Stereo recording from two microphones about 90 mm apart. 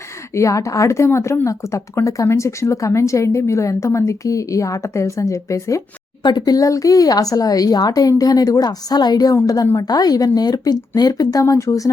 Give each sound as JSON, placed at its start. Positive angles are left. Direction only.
{"t": 0.3, "sound": "speech", "side_deg": 35}
{"t": 6.2, "sound": "speech", "side_deg": 50}